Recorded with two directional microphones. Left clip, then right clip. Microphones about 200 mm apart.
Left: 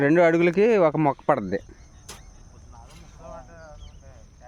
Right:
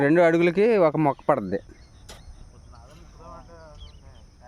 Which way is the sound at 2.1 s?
55° left (ahead or behind).